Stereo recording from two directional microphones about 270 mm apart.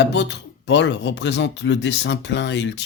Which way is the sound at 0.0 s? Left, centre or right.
Left.